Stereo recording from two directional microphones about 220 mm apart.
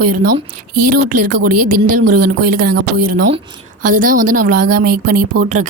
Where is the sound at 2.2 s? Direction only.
40° right (ahead or behind).